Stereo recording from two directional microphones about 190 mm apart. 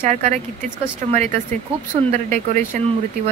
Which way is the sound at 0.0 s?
40° right (ahead or behind).